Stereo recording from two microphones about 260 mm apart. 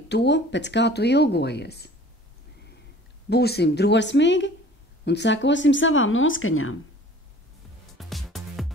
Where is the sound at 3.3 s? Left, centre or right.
Left.